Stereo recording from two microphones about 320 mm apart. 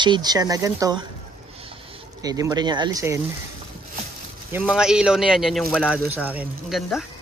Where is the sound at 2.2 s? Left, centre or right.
Centre.